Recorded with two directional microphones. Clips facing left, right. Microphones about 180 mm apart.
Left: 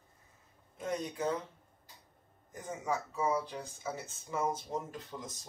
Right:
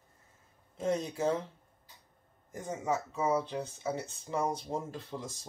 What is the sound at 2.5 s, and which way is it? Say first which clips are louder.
Speech: right 3 dB; 25° right (ahead or behind).